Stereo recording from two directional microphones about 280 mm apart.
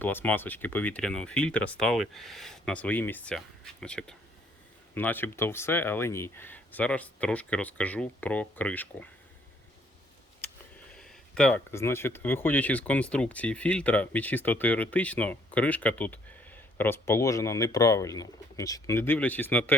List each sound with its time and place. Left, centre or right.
0.0 s speech: centre
10.9 s speech: centre